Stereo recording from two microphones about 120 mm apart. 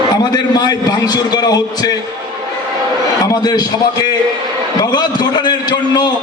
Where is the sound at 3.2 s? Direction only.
35° left (ahead or behind).